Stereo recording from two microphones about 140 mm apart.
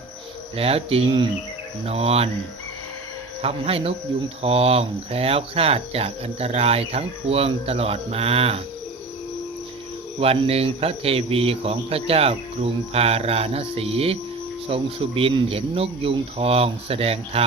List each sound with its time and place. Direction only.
0.5 s speech: 45° right (ahead or behind)
3.4 s speech: 45° right (ahead or behind)
10.2 s speech: 45° right (ahead or behind)